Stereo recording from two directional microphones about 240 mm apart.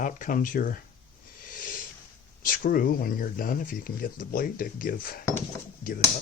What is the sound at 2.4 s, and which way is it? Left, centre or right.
Speech, left.